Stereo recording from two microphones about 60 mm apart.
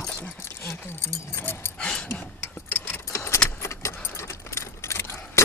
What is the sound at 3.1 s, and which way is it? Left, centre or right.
Keys jangling, left.